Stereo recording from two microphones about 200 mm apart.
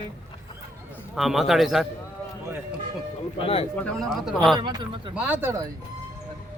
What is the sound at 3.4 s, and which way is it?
Speech, 30° left (ahead or behind).